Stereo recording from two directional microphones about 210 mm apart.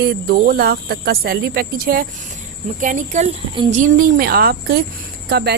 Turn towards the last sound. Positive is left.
turn(degrees=-50)  # may be behind; listen again after turning